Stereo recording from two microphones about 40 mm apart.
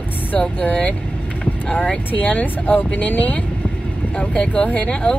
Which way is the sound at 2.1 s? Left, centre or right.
Left.